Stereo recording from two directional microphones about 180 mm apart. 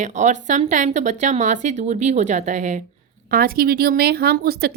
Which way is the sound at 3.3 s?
55° right (ahead or behind).